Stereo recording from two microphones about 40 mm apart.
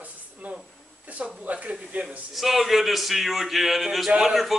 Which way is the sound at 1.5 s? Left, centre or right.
Right.